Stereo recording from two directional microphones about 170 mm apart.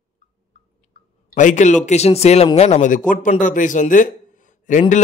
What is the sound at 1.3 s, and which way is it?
A man's voice, 45° left (ahead or behind).